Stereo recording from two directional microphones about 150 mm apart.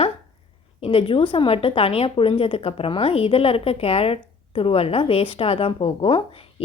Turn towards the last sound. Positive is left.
turn(degrees=40)  # may be behind; listen again after turning